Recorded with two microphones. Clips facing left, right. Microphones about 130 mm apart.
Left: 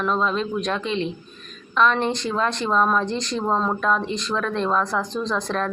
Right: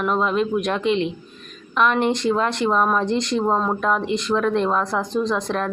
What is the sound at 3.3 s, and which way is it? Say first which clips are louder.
Speech: even; 15° right (ahead or behind).